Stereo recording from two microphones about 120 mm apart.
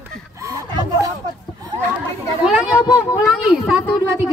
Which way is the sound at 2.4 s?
5° right (ahead or behind).